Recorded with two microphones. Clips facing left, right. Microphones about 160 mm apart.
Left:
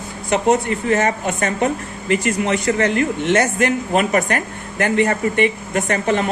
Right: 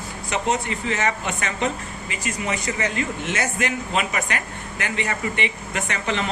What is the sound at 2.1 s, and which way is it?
A man's voice, 60° left (ahead or behind).